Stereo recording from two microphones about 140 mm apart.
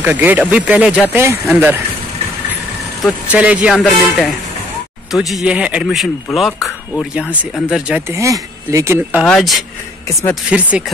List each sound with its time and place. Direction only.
0.0 s speech: 15° right (ahead or behind)
3.0 s speech: 10° right (ahead or behind)
8.1 s speech: 20° right (ahead or behind)
9.2 s speech: centre (ahead or behind)